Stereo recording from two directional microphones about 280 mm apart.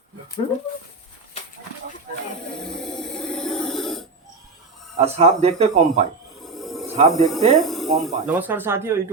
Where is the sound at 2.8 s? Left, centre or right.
Centre.